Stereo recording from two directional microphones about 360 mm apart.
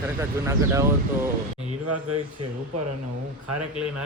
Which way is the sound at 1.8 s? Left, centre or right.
Right.